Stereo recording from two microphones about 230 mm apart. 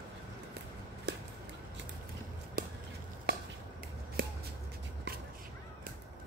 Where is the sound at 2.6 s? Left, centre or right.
Right.